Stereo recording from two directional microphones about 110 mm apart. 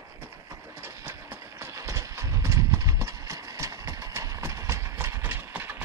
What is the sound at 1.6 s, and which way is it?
Clip-clop, 30° right (ahead or behind).